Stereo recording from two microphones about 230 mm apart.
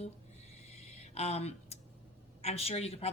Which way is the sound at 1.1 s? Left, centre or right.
Left.